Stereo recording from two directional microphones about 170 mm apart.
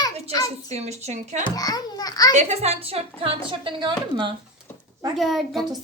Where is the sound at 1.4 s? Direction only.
20° left (ahead or behind).